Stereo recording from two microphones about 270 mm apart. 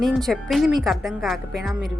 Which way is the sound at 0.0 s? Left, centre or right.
Centre.